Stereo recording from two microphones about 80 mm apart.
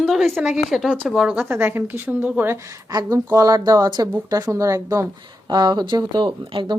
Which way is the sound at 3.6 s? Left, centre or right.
Right.